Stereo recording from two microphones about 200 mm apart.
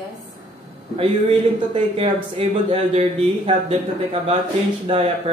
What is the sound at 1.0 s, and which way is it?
A man's voice, 30° right (ahead or behind).